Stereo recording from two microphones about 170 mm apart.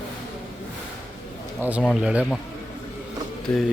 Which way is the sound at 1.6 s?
10° right (ahead or behind).